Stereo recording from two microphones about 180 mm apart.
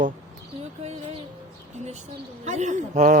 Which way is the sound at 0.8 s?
35° right (ahead or behind).